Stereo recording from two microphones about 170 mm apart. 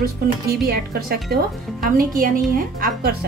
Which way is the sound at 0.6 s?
65° right (ahead or behind).